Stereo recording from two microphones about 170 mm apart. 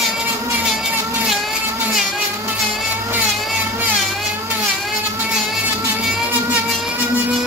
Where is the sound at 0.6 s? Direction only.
5° right (ahead or behind).